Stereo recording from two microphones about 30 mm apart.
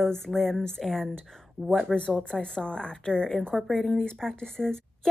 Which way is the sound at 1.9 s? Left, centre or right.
Left.